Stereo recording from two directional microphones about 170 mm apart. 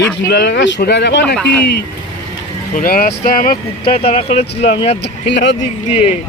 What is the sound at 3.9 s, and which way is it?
Speech, 35° left (ahead or behind).